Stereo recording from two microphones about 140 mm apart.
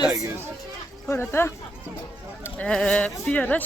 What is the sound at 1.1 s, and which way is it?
Speech, 15° left (ahead or behind).